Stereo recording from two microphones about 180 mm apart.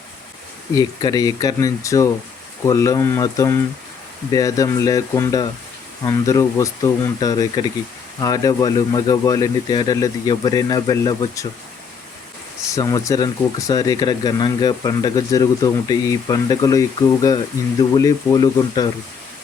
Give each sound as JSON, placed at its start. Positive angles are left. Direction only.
{"t": 0.8, "sound": "speech", "side_deg": 20}
{"t": 12.7, "sound": "speech", "side_deg": 20}